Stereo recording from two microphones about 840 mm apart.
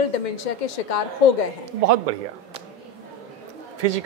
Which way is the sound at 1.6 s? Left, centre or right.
Right.